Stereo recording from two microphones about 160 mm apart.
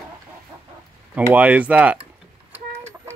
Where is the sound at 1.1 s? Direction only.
10° right (ahead or behind).